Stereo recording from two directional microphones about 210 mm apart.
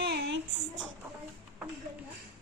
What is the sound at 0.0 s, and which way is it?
Child singing, 50° right (ahead or behind).